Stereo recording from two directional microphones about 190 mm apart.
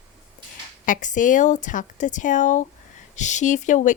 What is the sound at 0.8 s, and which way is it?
A woman's voice, 45° left (ahead or behind).